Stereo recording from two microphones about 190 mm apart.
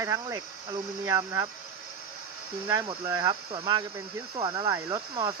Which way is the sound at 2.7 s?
25° right (ahead or behind).